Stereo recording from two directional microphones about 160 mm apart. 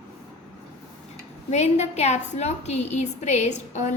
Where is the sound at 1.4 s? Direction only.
45° left (ahead or behind).